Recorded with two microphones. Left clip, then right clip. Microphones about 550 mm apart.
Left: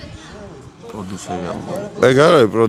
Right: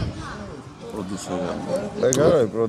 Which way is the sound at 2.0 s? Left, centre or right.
Left.